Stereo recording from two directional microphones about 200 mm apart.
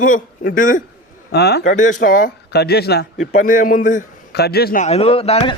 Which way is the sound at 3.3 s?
40° left (ahead or behind).